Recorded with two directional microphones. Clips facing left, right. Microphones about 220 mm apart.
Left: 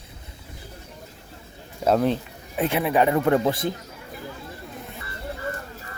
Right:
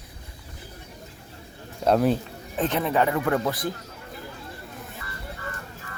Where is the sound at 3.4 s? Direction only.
25° left (ahead or behind).